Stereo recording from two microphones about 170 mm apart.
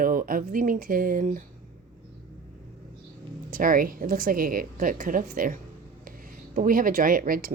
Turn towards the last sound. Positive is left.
turn(degrees=-55)  # may be behind; listen again after turning